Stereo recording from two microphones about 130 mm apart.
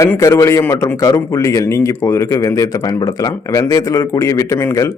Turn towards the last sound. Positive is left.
turn(degrees=20)  # may be behind; listen again after turning